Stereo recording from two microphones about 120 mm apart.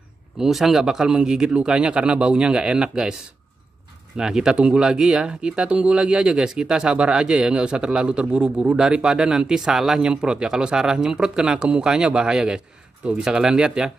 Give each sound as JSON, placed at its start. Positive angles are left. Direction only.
{"t": 0.4, "sound": "speech", "side_deg": 0}
{"t": 4.2, "sound": "speech", "side_deg": -5}